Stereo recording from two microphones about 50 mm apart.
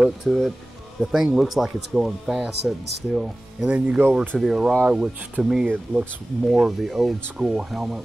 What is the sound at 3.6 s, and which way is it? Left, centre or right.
Speech, centre.